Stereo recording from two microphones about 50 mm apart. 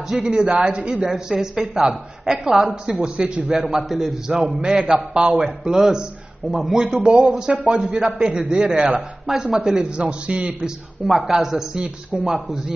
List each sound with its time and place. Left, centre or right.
0.1 s a man's voice: centre
4.5 s a man's voice: right
11.1 s a man's voice: centre